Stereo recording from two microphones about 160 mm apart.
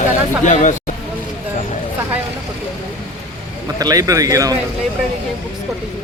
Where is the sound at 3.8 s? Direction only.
20° right (ahead or behind).